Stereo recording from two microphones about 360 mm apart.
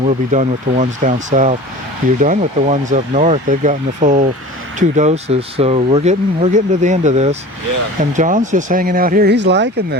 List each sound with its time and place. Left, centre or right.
0.0 s speech: centre